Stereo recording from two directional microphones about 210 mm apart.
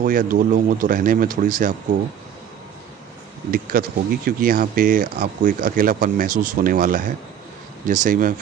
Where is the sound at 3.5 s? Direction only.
45° right (ahead or behind).